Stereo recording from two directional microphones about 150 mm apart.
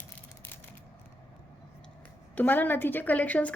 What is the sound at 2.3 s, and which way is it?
A woman's voice, 10° left (ahead or behind).